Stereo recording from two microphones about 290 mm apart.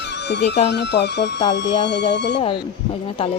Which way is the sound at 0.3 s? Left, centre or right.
Left.